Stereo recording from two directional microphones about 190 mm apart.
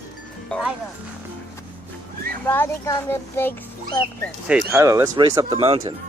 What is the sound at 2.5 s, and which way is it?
A child's voice, 10° left (ahead or behind).